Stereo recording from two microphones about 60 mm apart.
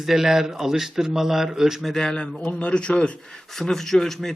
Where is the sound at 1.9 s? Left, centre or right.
Centre.